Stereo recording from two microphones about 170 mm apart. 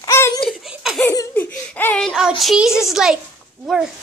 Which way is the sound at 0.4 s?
Centre (ahead or behind).